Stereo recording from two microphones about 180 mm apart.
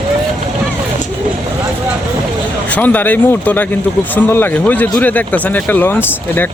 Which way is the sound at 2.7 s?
10° left (ahead or behind).